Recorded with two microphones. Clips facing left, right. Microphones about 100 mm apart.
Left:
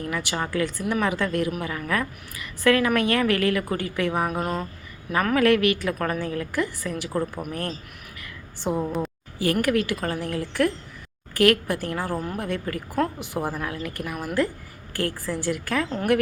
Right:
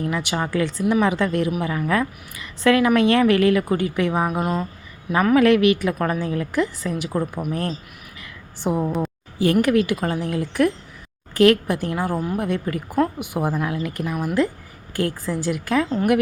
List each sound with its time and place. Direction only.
0.0 s a woman's voice: 20° right (ahead or behind)
4.3 s a woman's voice: 10° right (ahead or behind)
5.3 s a woman's voice: 20° right (ahead or behind)
8.2 s a sound: 20° right (ahead or behind)
9.0 s a woman's voice: 20° right (ahead or behind)
12.4 s a woman's voice: 20° right (ahead or behind)